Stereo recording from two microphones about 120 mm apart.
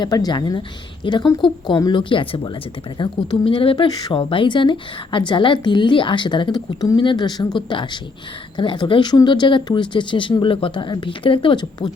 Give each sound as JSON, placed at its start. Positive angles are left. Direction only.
{"t": 0.0, "sound": "speech", "side_deg": 35}